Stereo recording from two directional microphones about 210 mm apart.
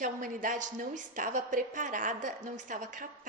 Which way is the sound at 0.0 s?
40° right (ahead or behind).